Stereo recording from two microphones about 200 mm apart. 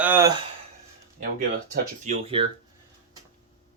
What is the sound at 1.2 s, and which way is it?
Speech, 45° right (ahead or behind).